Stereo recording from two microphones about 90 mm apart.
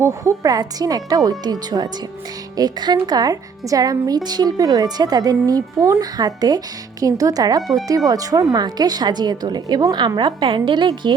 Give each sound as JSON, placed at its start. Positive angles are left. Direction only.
{"t": 0.0, "sound": "a woman's voice", "side_deg": -35}
{"t": 10.2, "sound": "a woman's voice", "side_deg": -65}